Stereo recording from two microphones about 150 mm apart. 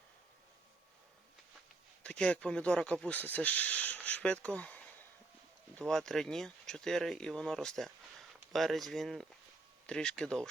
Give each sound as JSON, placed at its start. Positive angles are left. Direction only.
{"t": 2.0, "sound": "speech", "side_deg": 10}
{"t": 5.8, "sound": "speech", "side_deg": 5}